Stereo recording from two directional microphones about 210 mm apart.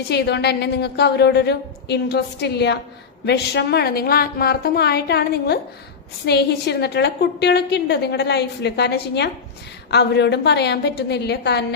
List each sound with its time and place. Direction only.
0.1 s a woman's voice: 55° left (ahead or behind)